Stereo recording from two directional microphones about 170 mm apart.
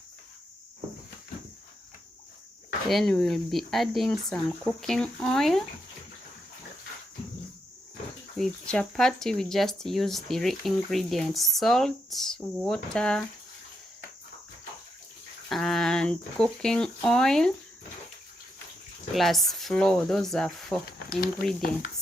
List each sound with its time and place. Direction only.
2.9 s speech: centre (ahead or behind)
8.4 s speech: 5° left (ahead or behind)
15.4 s speech: centre (ahead or behind)
19.1 s speech: centre (ahead or behind)
20.8 s speech: 60° left (ahead or behind)